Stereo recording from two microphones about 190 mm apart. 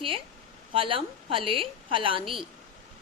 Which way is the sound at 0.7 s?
30° right (ahead or behind).